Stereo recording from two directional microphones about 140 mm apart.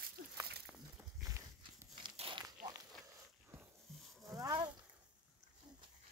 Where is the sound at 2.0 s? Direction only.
35° right (ahead or behind).